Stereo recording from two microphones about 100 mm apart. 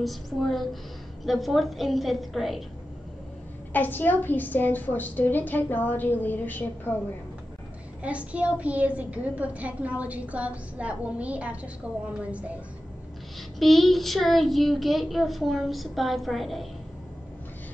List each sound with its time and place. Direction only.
0.0 s a child's voice: centre (ahead or behind)
3.7 s a woman's voice: 20° left (ahead or behind)
8.0 s a woman's voice: 15° right (ahead or behind)
13.6 s a child's voice: centre (ahead or behind)